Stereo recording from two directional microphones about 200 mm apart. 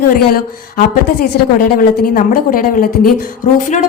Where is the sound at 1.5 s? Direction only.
45° left (ahead or behind).